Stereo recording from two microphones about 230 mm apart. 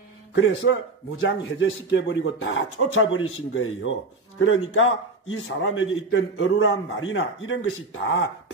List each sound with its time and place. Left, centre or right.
0.3 s a man's voice: left